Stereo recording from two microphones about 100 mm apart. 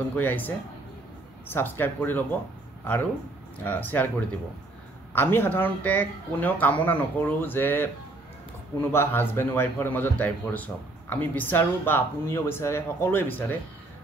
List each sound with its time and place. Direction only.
0.1 s a man's voice: 20° left (ahead or behind)
1.5 s a man's voice: 20° left (ahead or behind)
3.6 s speech: 20° left (ahead or behind)
5.1 s a man's voice: 20° left (ahead or behind)